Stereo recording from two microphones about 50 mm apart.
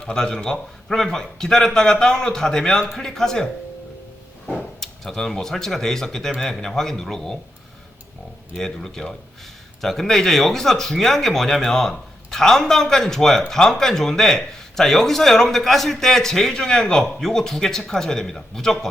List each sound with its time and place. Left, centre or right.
0.0 s a man's voice: centre
8.5 s a man's voice: centre